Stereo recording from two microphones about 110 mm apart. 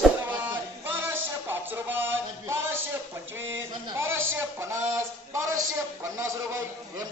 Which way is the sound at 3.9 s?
25° right (ahead or behind).